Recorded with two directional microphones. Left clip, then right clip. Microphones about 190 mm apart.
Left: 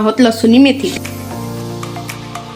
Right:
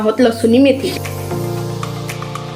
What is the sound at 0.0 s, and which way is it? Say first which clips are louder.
Speech: left 1 dB; 65° left (ahead or behind).